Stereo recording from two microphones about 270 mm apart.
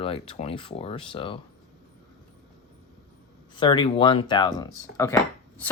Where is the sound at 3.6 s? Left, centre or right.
Centre.